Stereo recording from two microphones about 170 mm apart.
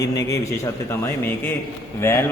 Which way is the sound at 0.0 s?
20° left (ahead or behind).